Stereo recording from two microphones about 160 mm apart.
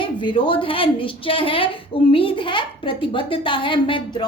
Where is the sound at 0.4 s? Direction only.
35° left (ahead or behind).